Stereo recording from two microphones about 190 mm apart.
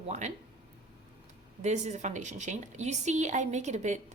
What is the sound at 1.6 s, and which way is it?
A woman's voice, 35° right (ahead or behind).